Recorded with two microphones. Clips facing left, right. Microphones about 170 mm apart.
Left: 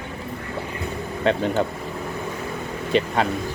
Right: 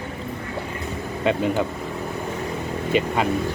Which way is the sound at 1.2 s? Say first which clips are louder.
Even; 10° right (ahead or behind).